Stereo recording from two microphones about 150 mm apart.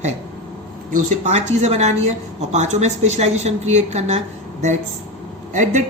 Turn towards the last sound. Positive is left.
turn(degrees=-55)  # may be behind; listen again after turning